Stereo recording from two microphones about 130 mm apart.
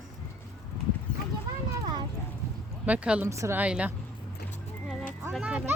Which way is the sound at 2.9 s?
10° right (ahead or behind).